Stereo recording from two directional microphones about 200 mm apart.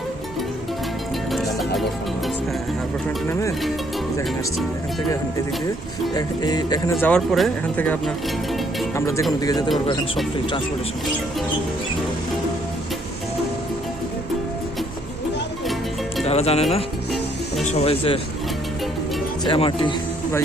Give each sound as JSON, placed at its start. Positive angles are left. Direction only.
{"t": 1.3, "sound": "music", "side_deg": 0}
{"t": 6.1, "sound": "speech", "side_deg": 20}
{"t": 7.0, "sound": "speech", "side_deg": 5}
{"t": 9.0, "sound": "speech", "side_deg": 15}
{"t": 16.2, "sound": "speech", "side_deg": 30}
{"t": 19.5, "sound": "speech", "side_deg": 25}